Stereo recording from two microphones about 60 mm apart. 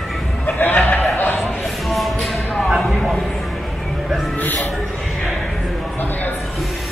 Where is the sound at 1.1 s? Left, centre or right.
Left.